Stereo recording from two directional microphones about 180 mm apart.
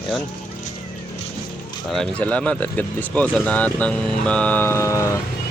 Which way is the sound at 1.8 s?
5° left (ahead or behind).